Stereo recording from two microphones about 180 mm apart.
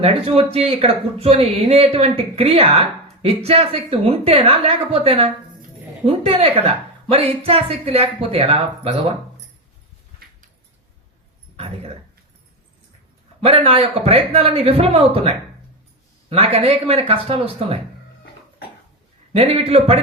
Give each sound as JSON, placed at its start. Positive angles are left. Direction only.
{"t": 0.0, "sound": "speech", "side_deg": -30}
{"t": 11.5, "sound": "speech", "side_deg": -35}
{"t": 13.4, "sound": "speech", "side_deg": -35}
{"t": 19.3, "sound": "speech", "side_deg": -35}